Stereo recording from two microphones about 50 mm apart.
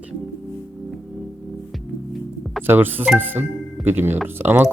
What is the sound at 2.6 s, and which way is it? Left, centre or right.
Speech, right.